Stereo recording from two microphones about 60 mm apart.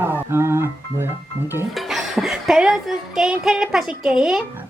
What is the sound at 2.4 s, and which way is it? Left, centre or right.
A woman's voice, centre.